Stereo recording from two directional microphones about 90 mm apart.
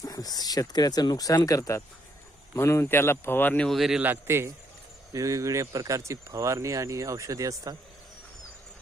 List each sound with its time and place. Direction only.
0.0 s speech: 45° left (ahead or behind); by 3.7 s 20° left (ahead or behind)
3.7 s speech: 5° right (ahead or behind)
4.0 s speech: 25° right (ahead or behind)